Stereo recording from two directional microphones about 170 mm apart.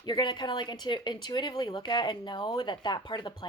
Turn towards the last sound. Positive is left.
turn(degrees=25)  # may be behind; listen again after turning